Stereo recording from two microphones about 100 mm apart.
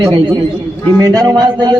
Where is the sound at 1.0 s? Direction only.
35° right (ahead or behind).